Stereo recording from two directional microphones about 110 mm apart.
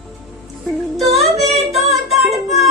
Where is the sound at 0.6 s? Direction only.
Centre (ahead or behind).